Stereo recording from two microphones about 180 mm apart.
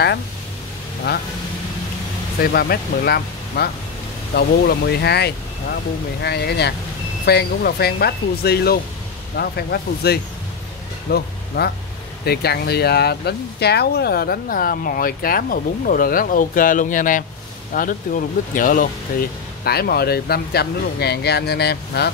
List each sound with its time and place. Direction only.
2.4 s speech: 60° left (ahead or behind)
19.6 s speech: 60° left (ahead or behind)